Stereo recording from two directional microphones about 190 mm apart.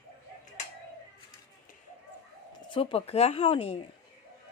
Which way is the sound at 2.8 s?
30° left (ahead or behind).